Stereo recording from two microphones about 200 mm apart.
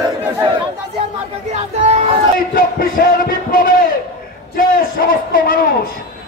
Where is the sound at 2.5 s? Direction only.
45° left (ahead or behind).